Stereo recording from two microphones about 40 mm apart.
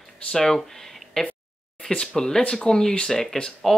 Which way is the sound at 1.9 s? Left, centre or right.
Left.